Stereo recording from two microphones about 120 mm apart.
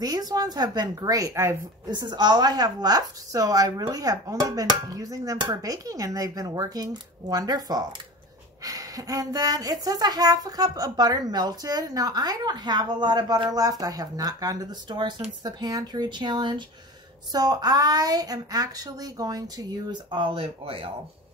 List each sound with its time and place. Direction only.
0.0 s a woman's voice: 30° right (ahead or behind)
1.9 s a woman's voice: 35° right (ahead or behind)